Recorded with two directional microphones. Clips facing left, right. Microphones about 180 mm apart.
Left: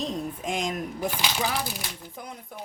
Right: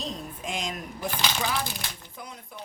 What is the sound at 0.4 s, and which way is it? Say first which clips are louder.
Speech: left 3 dB; 50° left (ahead or behind).